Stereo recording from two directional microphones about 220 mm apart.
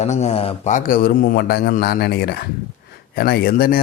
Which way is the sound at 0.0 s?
30° left (ahead or behind).